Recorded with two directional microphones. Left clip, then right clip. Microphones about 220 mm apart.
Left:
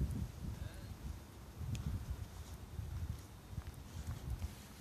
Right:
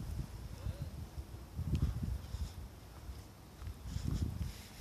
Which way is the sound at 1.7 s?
45° left (ahead or behind).